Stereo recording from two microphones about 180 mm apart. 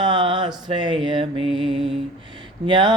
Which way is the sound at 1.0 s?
30° right (ahead or behind).